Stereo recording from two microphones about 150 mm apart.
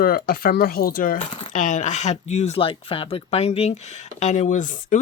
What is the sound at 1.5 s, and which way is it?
Speech, 55° left (ahead or behind).